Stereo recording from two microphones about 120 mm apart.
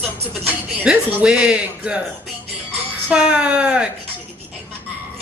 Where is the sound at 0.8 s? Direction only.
10° right (ahead or behind).